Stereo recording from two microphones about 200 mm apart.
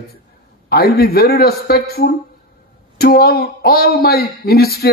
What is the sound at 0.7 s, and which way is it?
Speech, 50° left (ahead or behind).